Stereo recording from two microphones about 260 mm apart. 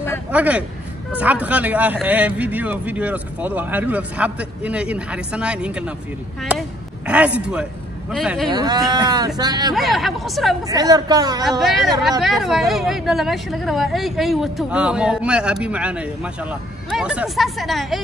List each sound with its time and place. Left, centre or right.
0.3 s speech: centre
7.1 s speech: centre
8.5 s a woman's voice: centre
9.8 s speech: centre
10.7 s a woman's voice: centre
11.6 s speech: centre